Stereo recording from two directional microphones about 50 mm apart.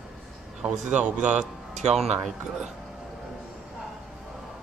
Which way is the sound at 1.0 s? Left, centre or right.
Right.